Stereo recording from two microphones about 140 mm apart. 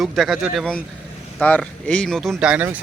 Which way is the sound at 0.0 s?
Centre (ahead or behind).